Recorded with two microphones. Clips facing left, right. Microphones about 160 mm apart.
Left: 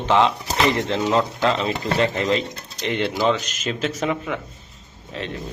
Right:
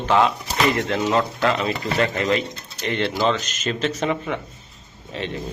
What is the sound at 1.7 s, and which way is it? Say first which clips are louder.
Speech: left 1 dB; 30° left (ahead or behind).